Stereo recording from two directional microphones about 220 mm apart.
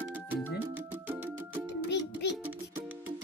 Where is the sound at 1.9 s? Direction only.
50° left (ahead or behind).